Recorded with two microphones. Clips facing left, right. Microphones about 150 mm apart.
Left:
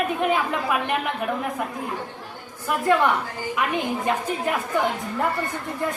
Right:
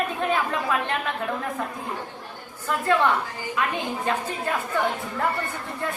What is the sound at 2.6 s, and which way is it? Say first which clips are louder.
Speech: left 2 dB; 15° left (ahead or behind).